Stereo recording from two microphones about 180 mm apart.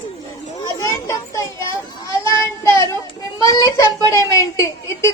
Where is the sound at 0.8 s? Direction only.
15° left (ahead or behind).